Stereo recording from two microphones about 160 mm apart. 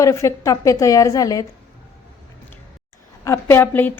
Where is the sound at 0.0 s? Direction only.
20° left (ahead or behind).